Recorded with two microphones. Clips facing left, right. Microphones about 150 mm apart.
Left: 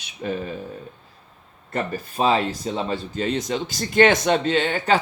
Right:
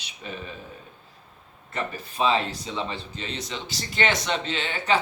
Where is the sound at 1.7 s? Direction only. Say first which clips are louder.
Left 5 dB; 45° left (ahead or behind).